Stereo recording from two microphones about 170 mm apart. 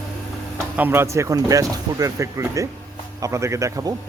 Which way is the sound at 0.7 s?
10° right (ahead or behind).